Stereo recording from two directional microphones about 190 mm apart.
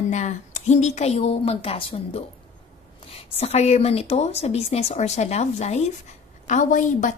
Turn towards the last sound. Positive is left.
turn(degrees=40)  # may be behind; listen again after turning